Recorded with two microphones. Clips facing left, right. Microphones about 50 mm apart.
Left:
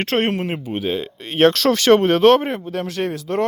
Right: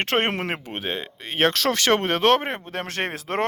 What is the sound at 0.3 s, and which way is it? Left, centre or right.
Speech, right.